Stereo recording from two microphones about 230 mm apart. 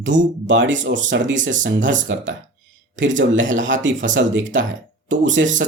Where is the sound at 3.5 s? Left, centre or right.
Right.